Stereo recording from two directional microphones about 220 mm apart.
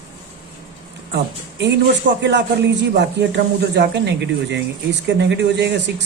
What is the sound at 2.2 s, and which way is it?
A man's voice, 50° right (ahead or behind).